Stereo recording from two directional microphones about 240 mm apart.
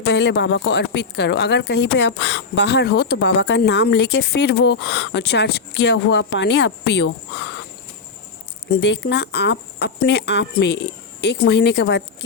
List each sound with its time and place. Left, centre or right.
0.0 s a woman's voice: left
8.8 s a woman's voice: left